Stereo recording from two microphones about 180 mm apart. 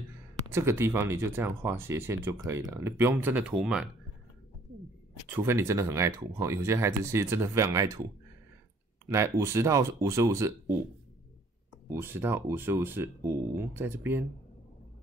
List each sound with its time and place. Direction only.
0.5 s speech: 15° right (ahead or behind)
5.3 s speech: 15° right (ahead or behind)
9.0 s speech: 15° right (ahead or behind)
11.9 s speech: 15° right (ahead or behind)